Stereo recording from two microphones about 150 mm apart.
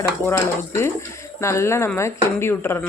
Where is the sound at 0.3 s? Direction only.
20° left (ahead or behind).